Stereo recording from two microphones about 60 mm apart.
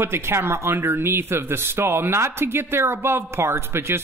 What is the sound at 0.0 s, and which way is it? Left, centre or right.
Speech, right.